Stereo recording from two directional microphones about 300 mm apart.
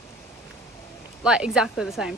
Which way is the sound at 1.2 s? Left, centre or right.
Centre.